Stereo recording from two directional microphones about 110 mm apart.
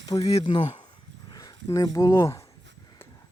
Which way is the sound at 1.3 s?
35° left (ahead or behind).